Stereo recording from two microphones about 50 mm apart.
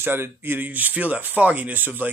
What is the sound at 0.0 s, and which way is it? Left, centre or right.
Speech, right.